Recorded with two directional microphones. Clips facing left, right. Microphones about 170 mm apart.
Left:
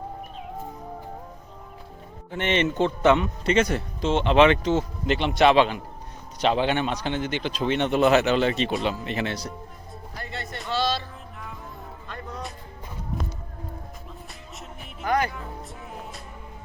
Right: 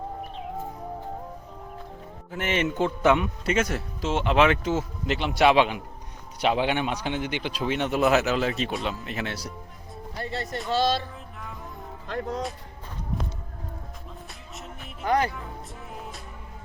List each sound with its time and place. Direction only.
2.3 s a man's voice: 5° right (ahead or behind)
10.2 s speech: 35° right (ahead or behind)
10.7 s speech: 50° right (ahead or behind)
12.0 s speech: 90° right
15.0 s speech: 30° right (ahead or behind)